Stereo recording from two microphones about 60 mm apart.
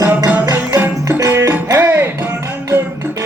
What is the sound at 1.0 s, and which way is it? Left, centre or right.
Music, right.